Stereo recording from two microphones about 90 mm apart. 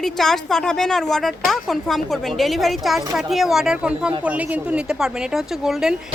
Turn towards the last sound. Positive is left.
turn(degrees=-5)  # may be behind; listen again after turning